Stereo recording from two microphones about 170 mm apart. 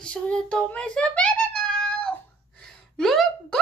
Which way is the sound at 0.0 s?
5° left (ahead or behind).